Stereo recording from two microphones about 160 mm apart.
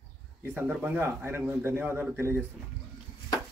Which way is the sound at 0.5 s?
10° right (ahead or behind).